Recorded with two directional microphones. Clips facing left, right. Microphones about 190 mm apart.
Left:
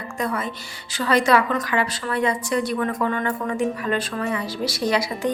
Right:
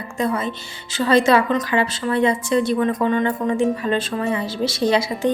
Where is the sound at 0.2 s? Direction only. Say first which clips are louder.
Right 4 dB; 25° right (ahead or behind).